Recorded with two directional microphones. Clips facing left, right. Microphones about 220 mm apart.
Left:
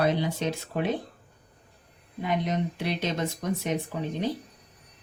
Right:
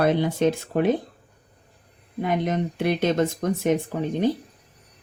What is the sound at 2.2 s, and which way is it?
Speech, 50° right (ahead or behind).